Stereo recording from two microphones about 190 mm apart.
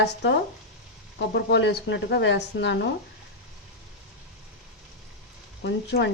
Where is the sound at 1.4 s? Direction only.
65° left (ahead or behind).